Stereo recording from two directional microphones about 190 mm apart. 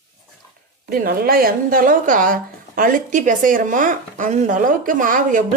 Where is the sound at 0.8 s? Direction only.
50° right (ahead or behind).